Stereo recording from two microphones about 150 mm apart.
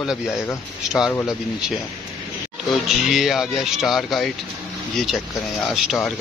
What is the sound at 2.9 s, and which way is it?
Speech, centre (ahead or behind).